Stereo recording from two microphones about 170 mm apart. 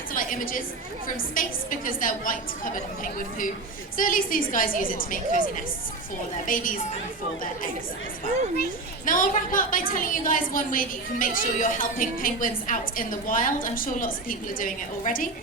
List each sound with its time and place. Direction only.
0.1 s a sound: 55° left (ahead or behind)
1.0 s a woman's voice: 55° left (ahead or behind)
3.9 s a woman's voice: 55° left (ahead or behind)
9.0 s a woman's voice: 55° left (ahead or behind)